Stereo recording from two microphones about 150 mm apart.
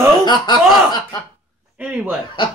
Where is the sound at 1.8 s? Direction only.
10° right (ahead or behind).